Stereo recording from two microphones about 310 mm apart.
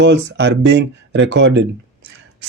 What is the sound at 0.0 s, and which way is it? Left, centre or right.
Speech, right.